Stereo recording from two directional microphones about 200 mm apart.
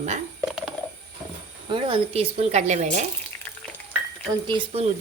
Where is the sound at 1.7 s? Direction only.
30° right (ahead or behind).